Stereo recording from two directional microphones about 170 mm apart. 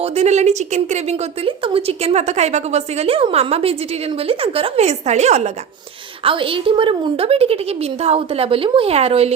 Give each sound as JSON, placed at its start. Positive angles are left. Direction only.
{"t": 0.0, "sound": "a woman's voice", "side_deg": -40}